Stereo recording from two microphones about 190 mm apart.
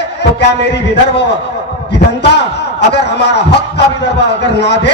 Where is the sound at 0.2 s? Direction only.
65° left (ahead or behind).